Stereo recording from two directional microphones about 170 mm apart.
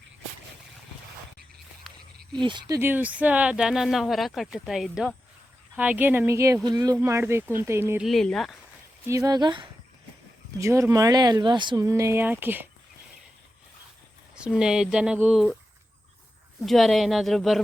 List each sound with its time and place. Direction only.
2.4 s speech: 25° right (ahead or behind)
8.0 s speech: centre (ahead or behind)
9.0 s speech: 20° right (ahead or behind)
14.3 s speech: 5° right (ahead or behind)
16.6 s speech: centre (ahead or behind)